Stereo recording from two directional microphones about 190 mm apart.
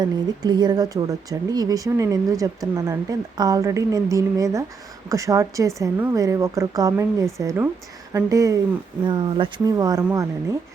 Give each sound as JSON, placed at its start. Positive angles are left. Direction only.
{"t": 0.0, "sound": "a woman's voice", "side_deg": -20}